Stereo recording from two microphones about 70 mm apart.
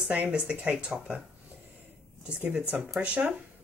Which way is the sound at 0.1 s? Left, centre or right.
Right.